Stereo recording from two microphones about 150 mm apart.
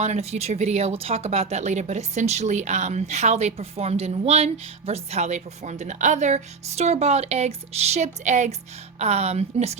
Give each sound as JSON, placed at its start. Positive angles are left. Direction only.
{"t": 0.0, "sound": "speech", "side_deg": -45}